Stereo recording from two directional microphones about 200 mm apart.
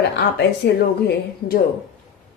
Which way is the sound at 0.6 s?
55° left (ahead or behind).